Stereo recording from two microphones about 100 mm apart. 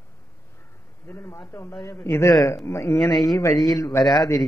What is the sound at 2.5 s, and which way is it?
Speech, 30° left (ahead or behind).